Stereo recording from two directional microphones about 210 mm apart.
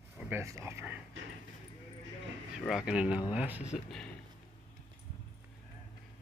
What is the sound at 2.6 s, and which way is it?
Speech, 5° right (ahead or behind).